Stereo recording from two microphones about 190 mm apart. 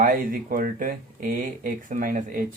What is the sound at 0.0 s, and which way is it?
Speech, 50° right (ahead or behind).